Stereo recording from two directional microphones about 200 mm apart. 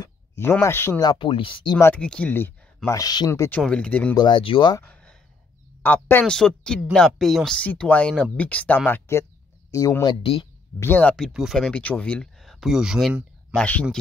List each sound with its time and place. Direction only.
0.0 s speech: 15° left (ahead or behind)
1.8 s speech: 10° left (ahead or behind)
4.1 s speech: 25° left (ahead or behind)
4.8 s a sound: 5° left (ahead or behind)
5.8 s speech: 10° left (ahead or behind); by 10.4 s 25° left (ahead or behind)
10.8 s speech: 10° left (ahead or behind)